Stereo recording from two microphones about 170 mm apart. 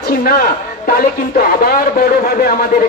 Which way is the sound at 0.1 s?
60° left (ahead or behind).